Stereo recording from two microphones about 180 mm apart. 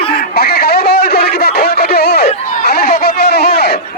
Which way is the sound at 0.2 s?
60° left (ahead or behind).